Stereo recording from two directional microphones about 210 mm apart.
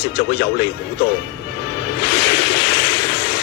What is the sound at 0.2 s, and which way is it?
Speech, 55° left (ahead or behind).